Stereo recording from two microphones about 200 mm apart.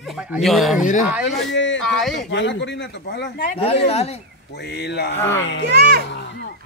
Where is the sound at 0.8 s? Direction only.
40° left (ahead or behind).